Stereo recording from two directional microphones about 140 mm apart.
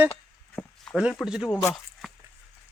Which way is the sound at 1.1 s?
5° right (ahead or behind).